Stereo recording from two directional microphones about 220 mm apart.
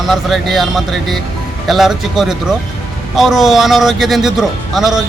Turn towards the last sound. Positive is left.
turn(degrees=0)  # may be behind; listen again after turning